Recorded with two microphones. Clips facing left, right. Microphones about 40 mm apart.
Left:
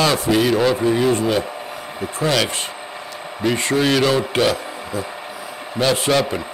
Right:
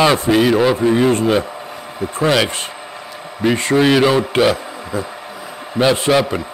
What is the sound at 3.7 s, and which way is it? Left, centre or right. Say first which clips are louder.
Speech: right 5 dB; centre.